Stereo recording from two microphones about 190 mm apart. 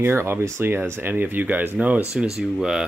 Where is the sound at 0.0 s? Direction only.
10° right (ahead or behind).